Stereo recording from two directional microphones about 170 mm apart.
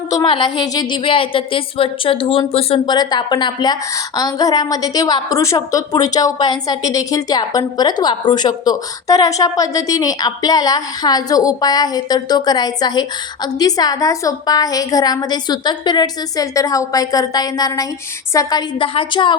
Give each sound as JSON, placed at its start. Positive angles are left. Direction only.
{"t": 0.1, "sound": "a woman's voice", "side_deg": 25}